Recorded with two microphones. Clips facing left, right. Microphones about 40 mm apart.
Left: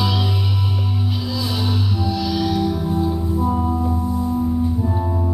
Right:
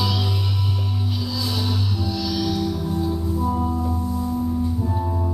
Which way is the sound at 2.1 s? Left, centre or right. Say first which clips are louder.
Left 3 dB; centre.